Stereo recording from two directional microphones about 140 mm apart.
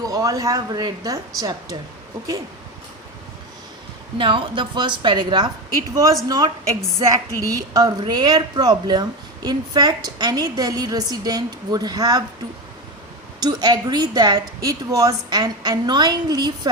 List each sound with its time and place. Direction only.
0.0 s a woman's voice: 25° right (ahead or behind)
4.2 s a woman's voice: 40° right (ahead or behind)
13.4 s a woman's voice: 30° right (ahead or behind)